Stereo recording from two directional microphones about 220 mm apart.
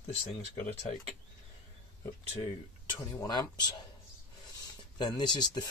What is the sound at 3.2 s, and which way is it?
Speech, 20° left (ahead or behind).